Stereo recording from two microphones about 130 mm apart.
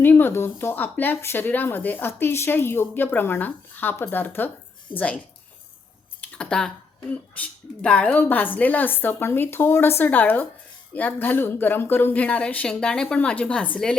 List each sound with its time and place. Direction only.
0.0 s speech: 15° left (ahead or behind)
6.3 s a sound: 5° left (ahead or behind)
7.1 s speech: 10° left (ahead or behind)